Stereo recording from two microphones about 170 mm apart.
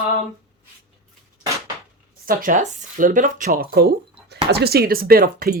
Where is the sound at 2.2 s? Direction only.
50° right (ahead or behind).